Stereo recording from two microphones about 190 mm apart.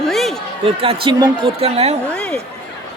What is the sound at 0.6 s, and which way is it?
Speech, 30° right (ahead or behind).